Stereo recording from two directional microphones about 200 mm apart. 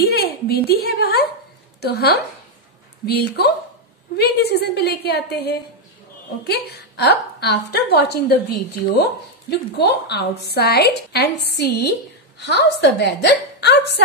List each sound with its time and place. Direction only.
0.0 s a woman's voice: 50° left (ahead or behind)